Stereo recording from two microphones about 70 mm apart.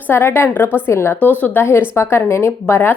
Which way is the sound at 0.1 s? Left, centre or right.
Left.